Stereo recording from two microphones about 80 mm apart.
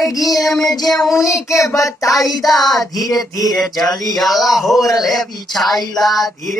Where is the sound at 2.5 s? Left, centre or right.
Left.